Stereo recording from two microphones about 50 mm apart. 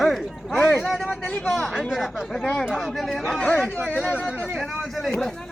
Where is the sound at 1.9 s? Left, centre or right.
Centre.